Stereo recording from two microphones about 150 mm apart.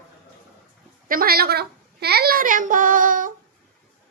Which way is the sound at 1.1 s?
80° right.